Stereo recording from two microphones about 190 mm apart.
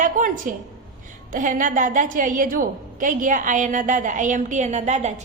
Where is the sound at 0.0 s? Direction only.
45° right (ahead or behind).